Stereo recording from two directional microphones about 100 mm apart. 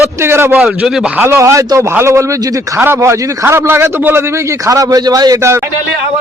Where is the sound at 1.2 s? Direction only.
25° right (ahead or behind).